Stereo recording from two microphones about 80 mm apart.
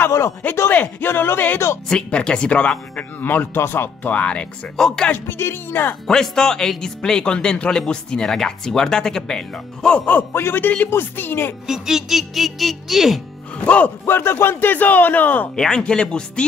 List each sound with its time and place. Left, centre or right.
0.0 s a sound: left
0.6 s a man's voice: left
1.9 s speech: centre; by 4.1 s left
4.1 s speech: centre
5.1 s a man's voice: left
6.0 s speech: centre
10.0 s a man's voice: left
11.6 s speech: centre
13.7 s speech: centre
14.0 s a man's voice: left
15.5 s speech: centre